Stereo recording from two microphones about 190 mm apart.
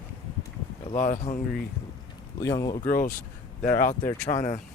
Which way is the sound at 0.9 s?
40° left (ahead or behind).